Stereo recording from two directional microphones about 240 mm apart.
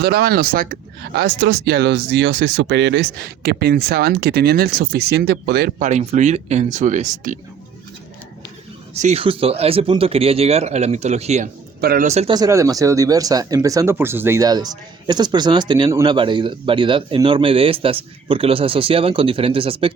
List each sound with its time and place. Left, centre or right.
0.0 s speech: right
5.9 s speech: right
9.0 s speech: right